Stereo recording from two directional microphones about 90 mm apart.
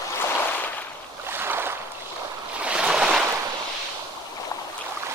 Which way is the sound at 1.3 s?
25° right (ahead or behind).